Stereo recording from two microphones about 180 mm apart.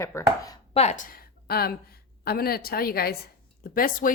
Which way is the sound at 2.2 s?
60° left (ahead or behind).